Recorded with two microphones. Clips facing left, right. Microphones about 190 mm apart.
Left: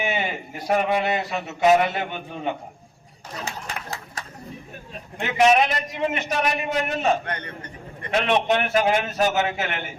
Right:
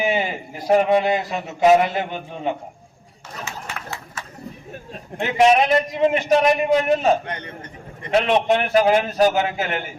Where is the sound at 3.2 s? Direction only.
35° left (ahead or behind).